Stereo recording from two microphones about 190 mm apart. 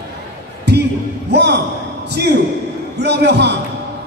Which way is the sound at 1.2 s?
60° right (ahead or behind).